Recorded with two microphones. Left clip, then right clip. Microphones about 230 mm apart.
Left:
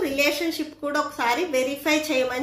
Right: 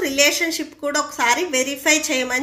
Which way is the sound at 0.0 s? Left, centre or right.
Right.